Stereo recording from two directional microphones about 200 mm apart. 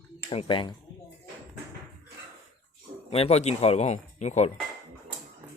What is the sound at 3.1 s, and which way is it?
Speech, 30° left (ahead or behind).